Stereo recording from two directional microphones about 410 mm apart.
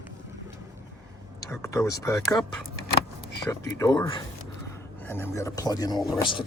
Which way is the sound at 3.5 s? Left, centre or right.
Centre.